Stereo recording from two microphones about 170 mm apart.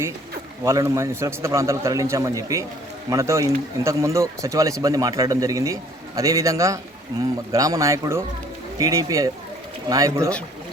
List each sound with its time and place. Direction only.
0.6 s a man's voice: 15° right (ahead or behind)